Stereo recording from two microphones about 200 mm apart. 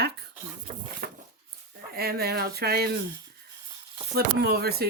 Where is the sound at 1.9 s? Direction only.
50° right (ahead or behind).